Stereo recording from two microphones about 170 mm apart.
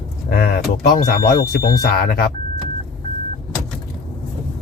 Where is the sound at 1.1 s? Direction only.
60° left (ahead or behind).